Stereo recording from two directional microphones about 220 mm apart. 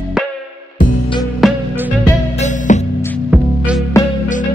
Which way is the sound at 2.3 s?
35° left (ahead or behind).